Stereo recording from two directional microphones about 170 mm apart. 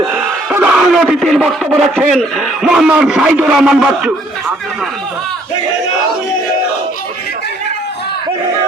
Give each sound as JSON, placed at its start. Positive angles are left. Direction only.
{"t": 0.1, "sound": "a man's voice", "side_deg": -10}